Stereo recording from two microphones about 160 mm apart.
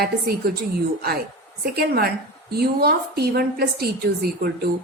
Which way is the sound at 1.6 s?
75° right (ahead or behind).